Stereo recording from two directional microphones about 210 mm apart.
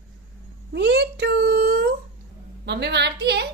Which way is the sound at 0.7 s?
55° right (ahead or behind).